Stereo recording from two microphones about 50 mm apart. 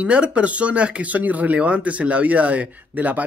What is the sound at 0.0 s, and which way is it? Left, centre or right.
Speech, right.